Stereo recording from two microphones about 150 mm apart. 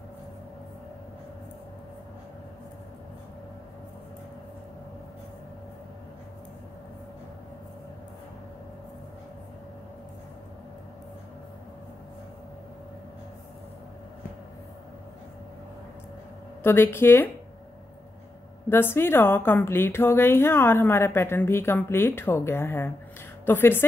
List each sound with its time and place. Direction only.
16.6 s a woman's voice: 15° left (ahead or behind)
18.7 s a woman's voice: 15° left (ahead or behind)